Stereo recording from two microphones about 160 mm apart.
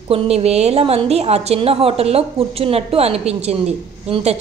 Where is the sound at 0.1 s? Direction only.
40° right (ahead or behind).